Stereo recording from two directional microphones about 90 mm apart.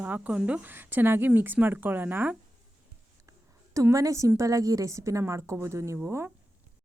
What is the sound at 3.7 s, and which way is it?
Speech, 35° right (ahead or behind).